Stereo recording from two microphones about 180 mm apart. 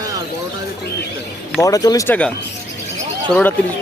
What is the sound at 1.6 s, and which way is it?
Speech, 20° left (ahead or behind).